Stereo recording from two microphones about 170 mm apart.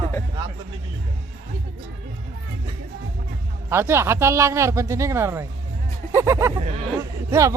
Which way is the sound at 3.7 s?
15° right (ahead or behind).